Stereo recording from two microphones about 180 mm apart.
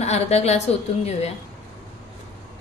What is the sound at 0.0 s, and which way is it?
Speech, 35° left (ahead or behind).